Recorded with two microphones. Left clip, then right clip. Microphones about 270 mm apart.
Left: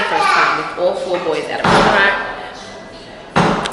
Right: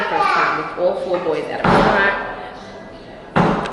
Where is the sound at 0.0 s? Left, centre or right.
Centre.